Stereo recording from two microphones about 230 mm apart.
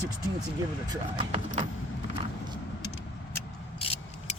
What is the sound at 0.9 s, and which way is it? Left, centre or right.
Speech, right.